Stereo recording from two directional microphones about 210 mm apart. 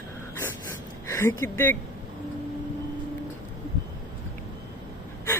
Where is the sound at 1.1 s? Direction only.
10° left (ahead or behind).